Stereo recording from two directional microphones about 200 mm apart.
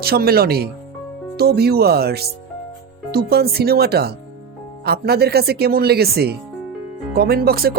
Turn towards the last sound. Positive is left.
turn(degrees=-50)  # may be behind; listen again after turning